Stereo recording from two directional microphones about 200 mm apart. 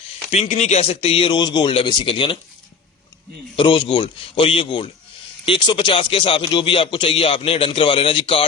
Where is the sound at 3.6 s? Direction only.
25° left (ahead or behind).